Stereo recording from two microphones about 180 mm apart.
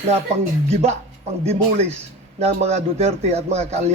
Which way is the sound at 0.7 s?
35° right (ahead or behind).